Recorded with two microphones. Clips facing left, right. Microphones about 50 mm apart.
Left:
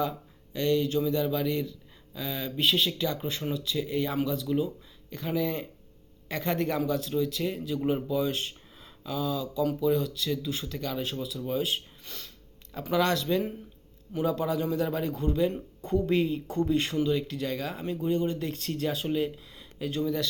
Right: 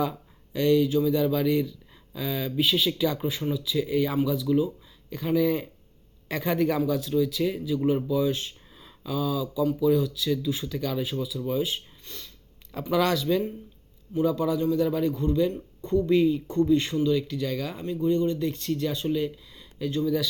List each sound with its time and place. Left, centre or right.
0.5 s speech: centre
5.4 s speech: centre
14.2 s speech: centre
17.8 s speech: left